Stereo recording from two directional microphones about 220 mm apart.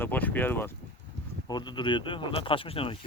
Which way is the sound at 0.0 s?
10° left (ahead or behind).